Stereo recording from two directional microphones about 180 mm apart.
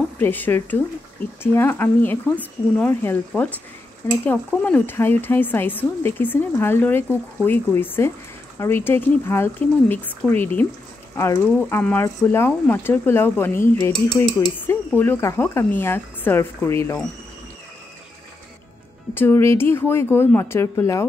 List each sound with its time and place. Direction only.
0.2 s speech: 10° left (ahead or behind)
19.1 s speech: 15° left (ahead or behind)